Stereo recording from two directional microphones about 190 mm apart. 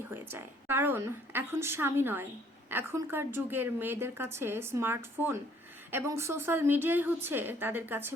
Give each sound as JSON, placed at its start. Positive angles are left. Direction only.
{"t": 0.1, "sound": "a woman's voice", "side_deg": -10}